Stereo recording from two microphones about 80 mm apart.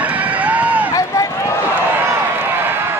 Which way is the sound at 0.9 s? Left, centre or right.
Left.